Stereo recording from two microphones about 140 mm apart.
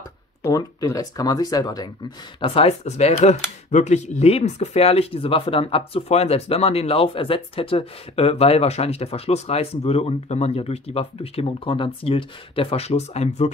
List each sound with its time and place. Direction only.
0.4 s speech: 25° left (ahead or behind); by 13.5 s 55° left (ahead or behind)